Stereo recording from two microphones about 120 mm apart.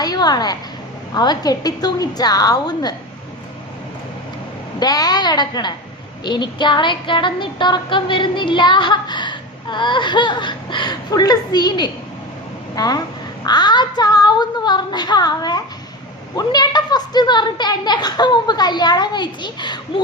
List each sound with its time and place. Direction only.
0.0 s child singing: 35° left (ahead or behind)
4.8 s child singing: 35° left (ahead or behind)